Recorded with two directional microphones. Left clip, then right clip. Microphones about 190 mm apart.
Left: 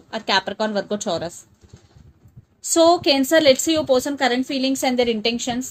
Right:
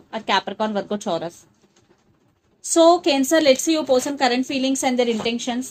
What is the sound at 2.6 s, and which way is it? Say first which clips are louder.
A woman's voice: right 1 dB; 30° left (ahead or behind).